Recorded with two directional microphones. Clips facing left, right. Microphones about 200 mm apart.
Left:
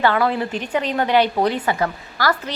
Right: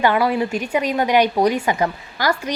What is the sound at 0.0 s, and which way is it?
A woman's voice, 15° right (ahead or behind).